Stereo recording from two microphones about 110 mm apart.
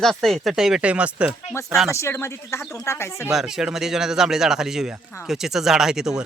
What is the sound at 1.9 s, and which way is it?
Speech, 25° left (ahead or behind).